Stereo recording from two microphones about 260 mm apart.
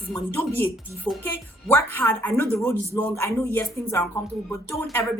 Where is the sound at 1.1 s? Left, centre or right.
Centre.